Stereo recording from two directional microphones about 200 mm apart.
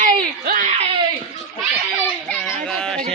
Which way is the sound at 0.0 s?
40° right (ahead or behind).